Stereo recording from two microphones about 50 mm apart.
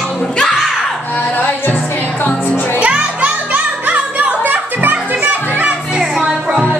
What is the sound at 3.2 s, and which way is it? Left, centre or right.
Music, right.